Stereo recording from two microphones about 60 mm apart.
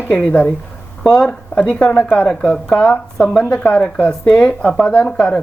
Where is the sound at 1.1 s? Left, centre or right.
Centre.